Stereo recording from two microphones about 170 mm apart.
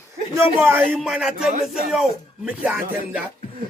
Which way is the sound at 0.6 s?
15° right (ahead or behind).